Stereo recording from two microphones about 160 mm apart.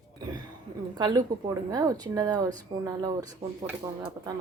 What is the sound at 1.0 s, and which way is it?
Speech, 25° right (ahead or behind).